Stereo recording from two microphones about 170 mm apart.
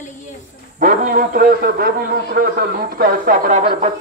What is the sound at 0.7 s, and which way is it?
A man's voice, 50° right (ahead or behind).